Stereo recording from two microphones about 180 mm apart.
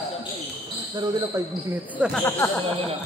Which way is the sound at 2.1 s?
10° left (ahead or behind).